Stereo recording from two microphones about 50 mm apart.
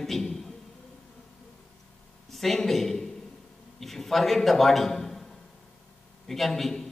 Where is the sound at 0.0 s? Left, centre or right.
Centre.